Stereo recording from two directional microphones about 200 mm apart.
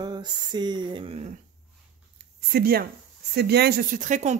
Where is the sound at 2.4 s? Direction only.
50° right (ahead or behind).